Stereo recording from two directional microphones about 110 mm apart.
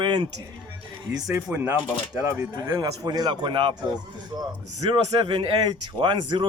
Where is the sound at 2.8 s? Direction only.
40° right (ahead or behind).